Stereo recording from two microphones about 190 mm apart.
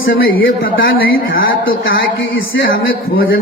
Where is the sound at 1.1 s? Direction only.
90° left.